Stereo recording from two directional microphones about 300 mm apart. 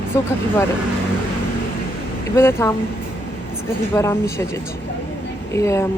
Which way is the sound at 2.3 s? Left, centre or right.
Centre.